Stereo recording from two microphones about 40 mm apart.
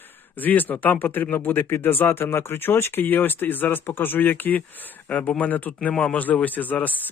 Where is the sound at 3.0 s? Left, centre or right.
Left.